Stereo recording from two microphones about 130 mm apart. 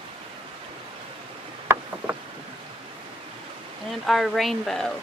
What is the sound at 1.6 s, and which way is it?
Rowboat, 20° right (ahead or behind).